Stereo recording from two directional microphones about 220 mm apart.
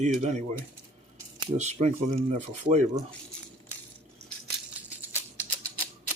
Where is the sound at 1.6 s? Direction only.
30° right (ahead or behind).